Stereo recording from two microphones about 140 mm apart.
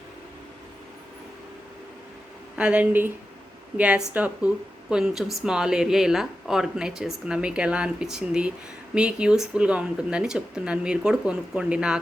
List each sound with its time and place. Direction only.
2.6 s speech: 10° right (ahead or behind)